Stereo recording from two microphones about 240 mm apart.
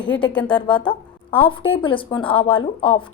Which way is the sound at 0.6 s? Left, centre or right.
Centre.